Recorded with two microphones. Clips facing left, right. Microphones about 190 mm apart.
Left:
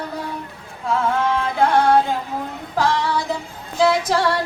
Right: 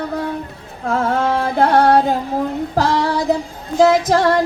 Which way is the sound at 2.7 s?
40° right (ahead or behind).